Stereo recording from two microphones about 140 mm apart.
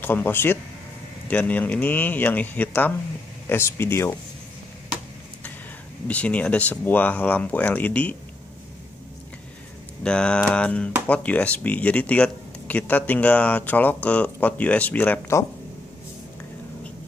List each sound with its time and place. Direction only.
0.0 s speech: 15° left (ahead or behind)
6.0 s speech: 10° left (ahead or behind)
10.0 s speech: 5° left (ahead or behind)